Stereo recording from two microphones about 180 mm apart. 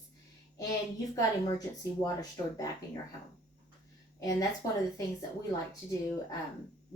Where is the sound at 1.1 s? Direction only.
20° left (ahead or behind).